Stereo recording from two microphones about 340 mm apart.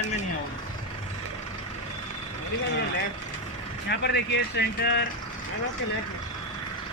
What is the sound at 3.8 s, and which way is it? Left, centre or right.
Speech, left.